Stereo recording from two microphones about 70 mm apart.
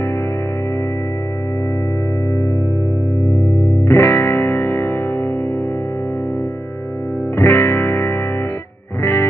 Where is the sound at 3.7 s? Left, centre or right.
Left.